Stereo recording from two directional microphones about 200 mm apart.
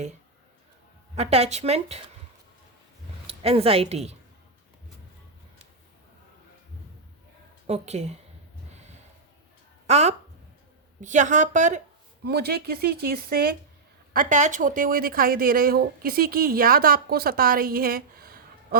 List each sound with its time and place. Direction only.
1.1 s a woman's voice: 30° right (ahead or behind)
3.2 s a woman's voice: 30° right (ahead or behind)
7.7 s a woman's voice: 35° right (ahead or behind)
9.8 s a woman's voice: 35° right (ahead or behind)
12.2 s speech: 55° right (ahead or behind)